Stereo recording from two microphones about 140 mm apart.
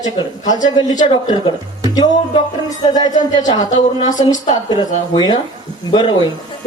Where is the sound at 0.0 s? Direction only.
30° left (ahead or behind).